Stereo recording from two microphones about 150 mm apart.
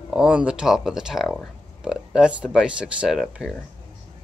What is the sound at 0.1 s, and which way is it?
Speech, 5° right (ahead or behind).